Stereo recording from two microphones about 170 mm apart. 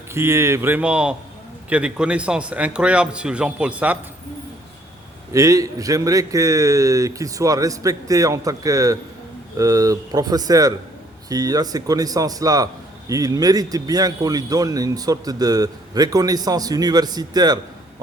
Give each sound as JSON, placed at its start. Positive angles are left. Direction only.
{"t": 0.1, "sound": "a man's voice", "side_deg": -15}
{"t": 5.3, "sound": "speech", "side_deg": -20}